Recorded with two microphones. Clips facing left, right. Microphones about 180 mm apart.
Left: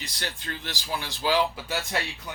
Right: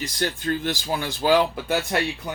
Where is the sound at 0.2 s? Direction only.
50° right (ahead or behind).